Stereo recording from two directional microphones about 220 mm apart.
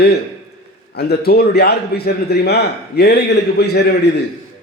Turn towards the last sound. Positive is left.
turn(degrees=50)  # may be behind; listen again after turning